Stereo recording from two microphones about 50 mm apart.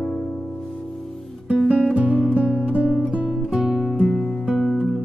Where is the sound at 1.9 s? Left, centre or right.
Right.